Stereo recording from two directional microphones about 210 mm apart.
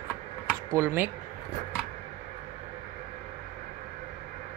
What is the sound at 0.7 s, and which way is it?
Speech, 10° right (ahead or behind).